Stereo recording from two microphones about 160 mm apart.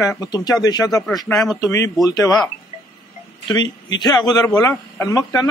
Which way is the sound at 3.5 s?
25° left (ahead or behind).